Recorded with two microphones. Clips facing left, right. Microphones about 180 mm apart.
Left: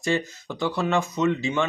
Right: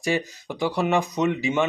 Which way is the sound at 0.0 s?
15° right (ahead or behind).